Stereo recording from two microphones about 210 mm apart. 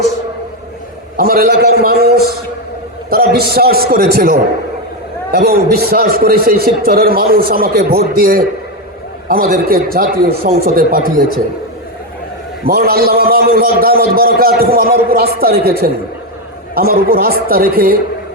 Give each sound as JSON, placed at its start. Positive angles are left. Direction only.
{"t": 1.1, "sound": "a man's voice", "side_deg": -45}
{"t": 12.6, "sound": "a man's voice", "side_deg": -45}